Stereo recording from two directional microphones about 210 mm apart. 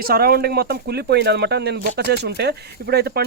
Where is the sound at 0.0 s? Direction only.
45° right (ahead or behind).